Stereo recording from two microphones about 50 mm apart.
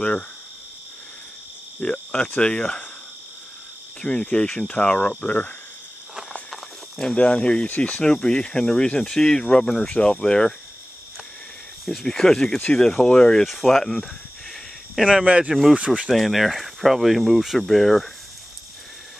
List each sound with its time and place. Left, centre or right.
1.8 s cricket: left
4.0 s cricket: left
6.5 s walk: centre
7.2 s cricket: left
7.6 s speech: left
8.0 s speech: centre
11.8 s speech: centre
15.2 s speech: right
16.1 s speech: centre